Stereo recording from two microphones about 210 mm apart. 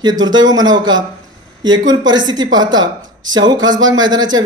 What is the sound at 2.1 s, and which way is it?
Speech, 20° right (ahead or behind).